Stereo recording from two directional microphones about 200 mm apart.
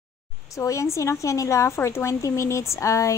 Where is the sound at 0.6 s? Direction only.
15° left (ahead or behind).